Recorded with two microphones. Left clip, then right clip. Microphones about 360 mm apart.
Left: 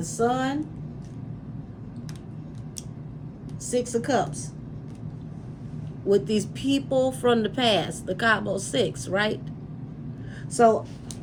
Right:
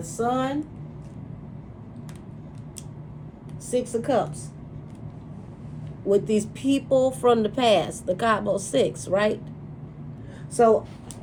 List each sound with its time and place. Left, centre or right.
0.2 s speech: centre
3.7 s speech: centre
6.1 s speech: centre
10.6 s speech: centre